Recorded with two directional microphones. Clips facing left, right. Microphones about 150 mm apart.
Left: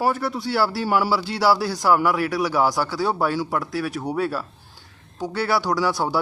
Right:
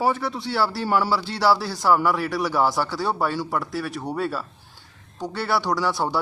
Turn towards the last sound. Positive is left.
turn(degrees=0)  # may be behind; listen again after turning